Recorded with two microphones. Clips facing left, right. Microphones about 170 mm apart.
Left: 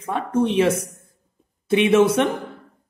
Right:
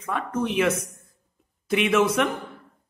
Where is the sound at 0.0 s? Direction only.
30° left (ahead or behind).